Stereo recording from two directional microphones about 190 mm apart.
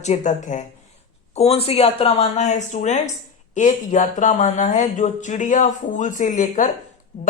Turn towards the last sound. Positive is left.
turn(degrees=35)  # may be behind; listen again after turning